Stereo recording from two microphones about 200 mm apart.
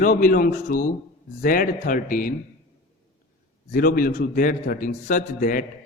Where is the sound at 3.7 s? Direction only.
45° left (ahead or behind).